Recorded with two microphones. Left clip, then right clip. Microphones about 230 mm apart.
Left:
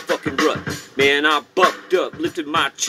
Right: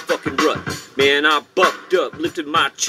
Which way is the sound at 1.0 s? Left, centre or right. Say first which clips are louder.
Right 1 dB; centre.